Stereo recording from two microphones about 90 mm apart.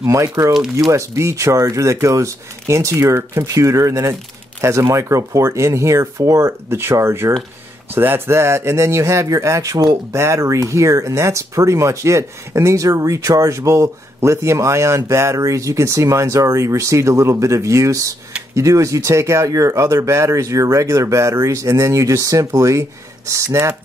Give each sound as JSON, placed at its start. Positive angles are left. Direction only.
{"t": 0.0, "sound": "speech", "side_deg": -35}